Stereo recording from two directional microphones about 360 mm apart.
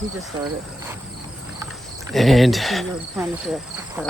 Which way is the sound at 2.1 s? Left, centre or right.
Centre.